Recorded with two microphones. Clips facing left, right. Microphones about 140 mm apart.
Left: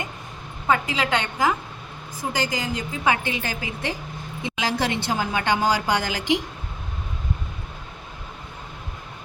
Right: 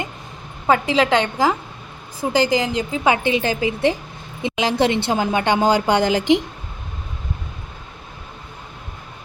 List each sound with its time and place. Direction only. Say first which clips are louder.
0.7 s a woman's voice: right 6 dB; 30° right (ahead or behind)